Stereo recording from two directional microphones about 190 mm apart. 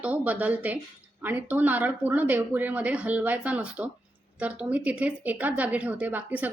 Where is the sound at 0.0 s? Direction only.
10° right (ahead or behind).